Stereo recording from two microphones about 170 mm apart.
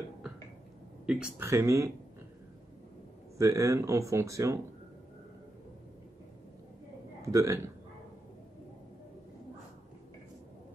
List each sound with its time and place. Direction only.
1.0 s speech: 5° right (ahead or behind)
1.5 s speech: 15° right (ahead or behind)
3.3 s speech: 20° right (ahead or behind)
7.2 s speech: 20° right (ahead or behind)